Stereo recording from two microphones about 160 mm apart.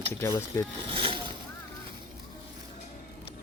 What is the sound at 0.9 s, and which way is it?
Splash, 35° right (ahead or behind).